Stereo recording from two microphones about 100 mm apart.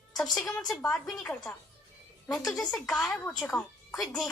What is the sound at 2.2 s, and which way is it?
A woman's voice, 5° left (ahead or behind).